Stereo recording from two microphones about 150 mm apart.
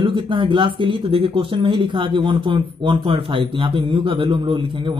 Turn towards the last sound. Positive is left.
turn(degrees=-35)  # may be behind; listen again after turning